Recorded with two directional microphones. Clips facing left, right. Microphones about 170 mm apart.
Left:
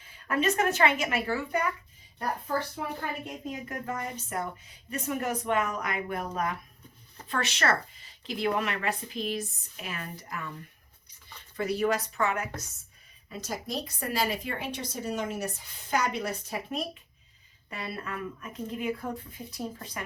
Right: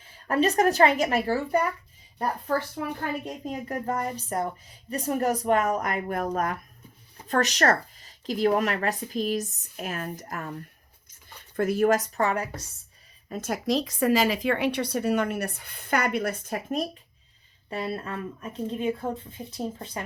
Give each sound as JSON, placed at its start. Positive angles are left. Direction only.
{"t": 0.3, "sound": "a woman's voice", "side_deg": -35}
{"t": 2.8, "sound": "speech", "side_deg": -55}
{"t": 3.2, "sound": "a woman's voice", "side_deg": -35}
{"t": 11.5, "sound": "speech", "side_deg": -50}
{"t": 13.3, "sound": "speech", "side_deg": -55}
{"t": 13.7, "sound": "a woman's voice", "side_deg": -90}
{"t": 17.7, "sound": "speech", "side_deg": -30}